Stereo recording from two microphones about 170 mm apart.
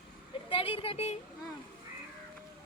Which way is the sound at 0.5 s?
30° left (ahead or behind).